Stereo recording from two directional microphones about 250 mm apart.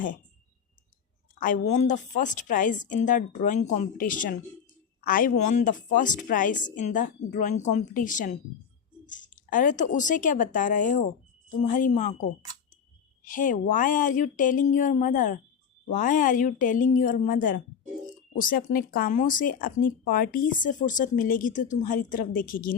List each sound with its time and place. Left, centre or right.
1.4 s speech: left
13.2 s speech: left